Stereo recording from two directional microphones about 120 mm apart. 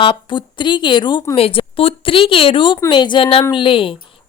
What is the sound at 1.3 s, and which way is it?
A woman's voice, 50° left (ahead or behind).